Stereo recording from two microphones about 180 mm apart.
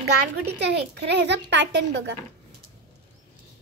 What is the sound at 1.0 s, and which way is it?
A woman's voice, 75° right (ahead or behind).